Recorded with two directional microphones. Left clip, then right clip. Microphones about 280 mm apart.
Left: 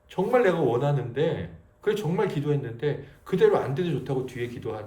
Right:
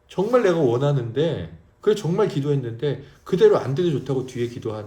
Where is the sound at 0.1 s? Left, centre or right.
Centre.